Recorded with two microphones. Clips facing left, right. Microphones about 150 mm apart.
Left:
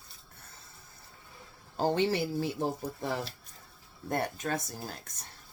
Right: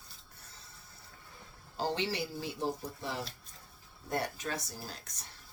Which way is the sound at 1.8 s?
50° left (ahead or behind).